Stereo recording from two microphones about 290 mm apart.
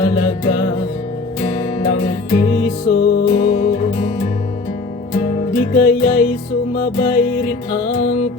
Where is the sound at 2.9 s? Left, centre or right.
Left.